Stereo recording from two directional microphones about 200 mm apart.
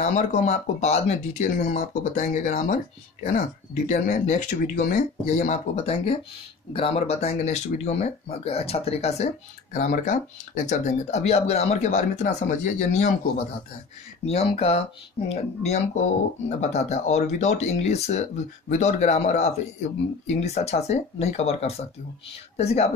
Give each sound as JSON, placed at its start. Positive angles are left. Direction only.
{"t": 0.0, "sound": "speech", "side_deg": 35}
{"t": 14.2, "sound": "speech", "side_deg": 30}